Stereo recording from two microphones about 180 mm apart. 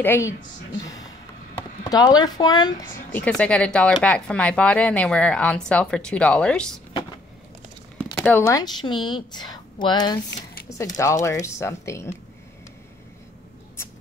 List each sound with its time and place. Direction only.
0.0 s speech: 10° left (ahead or behind)
1.9 s a woman's voice: 20° left (ahead or behind)
3.1 s speech: 10° left (ahead or behind)
8.2 s a woman's voice: 15° left (ahead or behind)